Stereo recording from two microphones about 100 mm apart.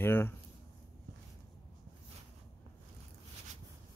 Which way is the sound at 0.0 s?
25° left (ahead or behind).